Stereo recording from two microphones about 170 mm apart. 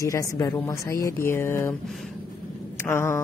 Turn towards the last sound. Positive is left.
turn(degrees=15)  # may be behind; listen again after turning